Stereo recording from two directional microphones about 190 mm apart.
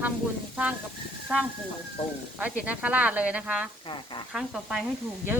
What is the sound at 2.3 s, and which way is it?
Speech, 5° right (ahead or behind).